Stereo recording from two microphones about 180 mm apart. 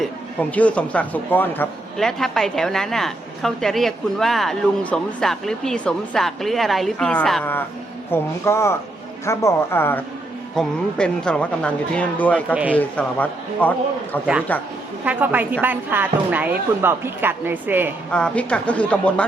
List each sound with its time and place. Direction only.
0.0 s a man's voice: 10° left (ahead or behind)
15.0 s speech: 10° right (ahead or behind)
18.1 s speech: 5° left (ahead or behind)